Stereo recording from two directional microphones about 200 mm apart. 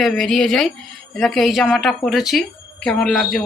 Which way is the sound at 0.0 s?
Centre (ahead or behind).